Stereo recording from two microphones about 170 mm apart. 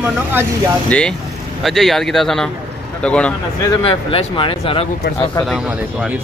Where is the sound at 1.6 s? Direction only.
Centre (ahead or behind).